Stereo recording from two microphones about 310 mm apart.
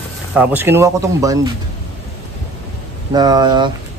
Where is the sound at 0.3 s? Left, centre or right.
Centre.